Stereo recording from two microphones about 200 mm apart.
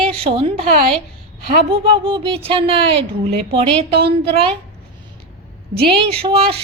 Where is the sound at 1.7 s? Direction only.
25° right (ahead or behind).